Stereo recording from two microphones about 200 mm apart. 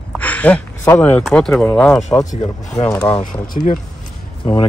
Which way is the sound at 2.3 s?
35° left (ahead or behind).